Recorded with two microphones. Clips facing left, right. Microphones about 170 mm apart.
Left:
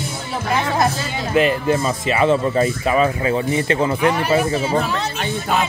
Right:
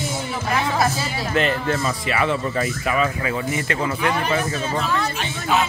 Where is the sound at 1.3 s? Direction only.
15° left (ahead or behind).